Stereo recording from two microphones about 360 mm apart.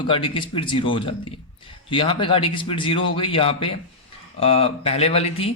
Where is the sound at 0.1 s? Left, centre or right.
Centre.